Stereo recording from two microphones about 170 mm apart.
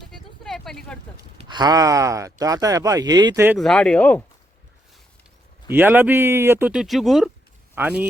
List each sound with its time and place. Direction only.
0.1 s a sound: centre (ahead or behind)
1.4 s speech: 25° right (ahead or behind)
3.6 s speech: 5° left (ahead or behind)
5.7 s speech: 10° right (ahead or behind)
7.8 s speech: 10° right (ahead or behind)